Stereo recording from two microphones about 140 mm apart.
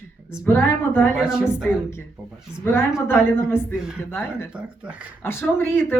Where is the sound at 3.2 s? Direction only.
20° left (ahead or behind).